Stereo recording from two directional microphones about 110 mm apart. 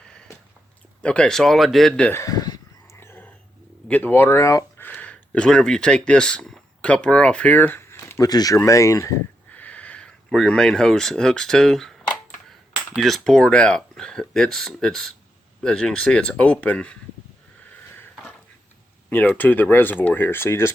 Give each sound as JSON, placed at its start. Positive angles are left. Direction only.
{"t": 0.0, "sound": "a sound", "side_deg": 5}
{"t": 1.0, "sound": "speech", "side_deg": 10}
{"t": 2.1, "sound": "a sound", "side_deg": 30}
{"t": 2.9, "sound": "a sound", "side_deg": 20}
{"t": 3.8, "sound": "speech", "side_deg": 15}
{"t": 4.9, "sound": "speech", "side_deg": 15}
{"t": 8.2, "sound": "speech", "side_deg": 35}
{"t": 9.5, "sound": "speech", "side_deg": 15}
{"t": 13.0, "sound": "speech", "side_deg": 5}
{"t": 19.1, "sound": "speech", "side_deg": 15}